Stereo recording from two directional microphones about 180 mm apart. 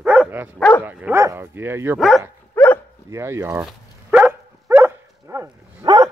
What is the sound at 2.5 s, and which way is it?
Dog, 15° left (ahead or behind).